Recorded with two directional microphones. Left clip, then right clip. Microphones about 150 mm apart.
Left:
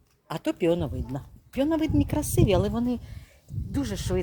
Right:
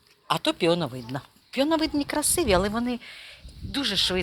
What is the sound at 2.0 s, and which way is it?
Speech, 30° left (ahead or behind).